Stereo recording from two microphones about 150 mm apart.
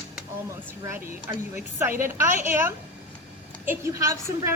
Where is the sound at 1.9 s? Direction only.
65° right (ahead or behind).